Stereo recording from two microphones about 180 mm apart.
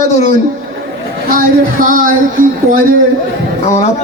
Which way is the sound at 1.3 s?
50° right (ahead or behind).